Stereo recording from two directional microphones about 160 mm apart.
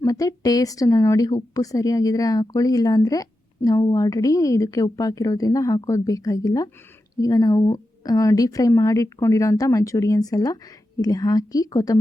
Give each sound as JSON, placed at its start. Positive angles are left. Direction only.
{"t": 0.0, "sound": "a woman's voice", "side_deg": 20}